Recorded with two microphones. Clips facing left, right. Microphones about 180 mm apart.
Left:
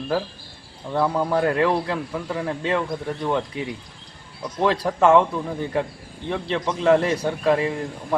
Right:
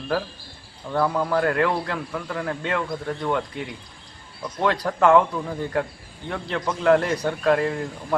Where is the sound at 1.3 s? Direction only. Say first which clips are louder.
Left 2 dB; 15° left (ahead or behind).